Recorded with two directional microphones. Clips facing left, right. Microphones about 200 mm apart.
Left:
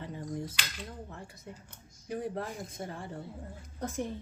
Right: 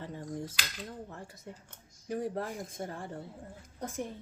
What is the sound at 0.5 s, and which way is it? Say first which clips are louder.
Speech: right 1 dB; 40° right (ahead or behind).